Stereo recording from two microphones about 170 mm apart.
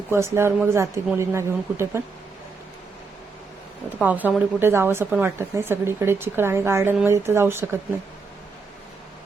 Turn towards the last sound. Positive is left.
turn(degrees=-15)  # may be behind; listen again after turning